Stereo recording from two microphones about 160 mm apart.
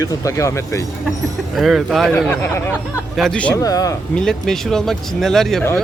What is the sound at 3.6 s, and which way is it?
Speech, 20° left (ahead or behind).